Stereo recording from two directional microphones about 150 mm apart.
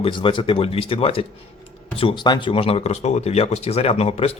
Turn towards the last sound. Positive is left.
turn(degrees=40)  # may be behind; listen again after turning